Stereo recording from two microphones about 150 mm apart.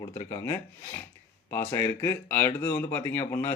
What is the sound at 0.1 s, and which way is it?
Speech, 25° left (ahead or behind).